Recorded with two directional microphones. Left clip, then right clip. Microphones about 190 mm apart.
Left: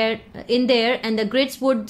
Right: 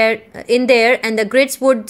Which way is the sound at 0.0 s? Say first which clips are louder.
Right 7 dB; 25° right (ahead or behind).